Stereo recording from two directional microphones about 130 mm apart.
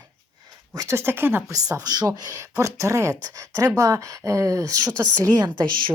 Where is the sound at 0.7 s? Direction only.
20° right (ahead or behind).